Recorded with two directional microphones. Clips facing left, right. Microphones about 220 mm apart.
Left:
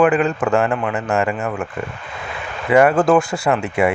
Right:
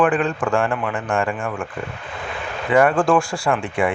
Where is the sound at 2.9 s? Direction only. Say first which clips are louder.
Left 3 dB; 20° left (ahead or behind).